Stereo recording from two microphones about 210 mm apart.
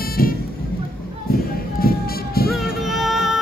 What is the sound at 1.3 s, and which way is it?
Music, 45° left (ahead or behind).